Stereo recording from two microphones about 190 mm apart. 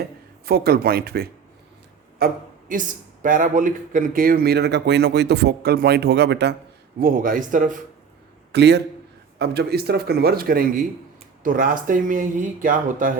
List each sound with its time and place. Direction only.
0.0 s a man's voice: 55° right (ahead or behind)
7.0 s speech: 45° right (ahead or behind)
8.5 s a man's voice: 60° right (ahead or behind); by 13.1 s 45° right (ahead or behind)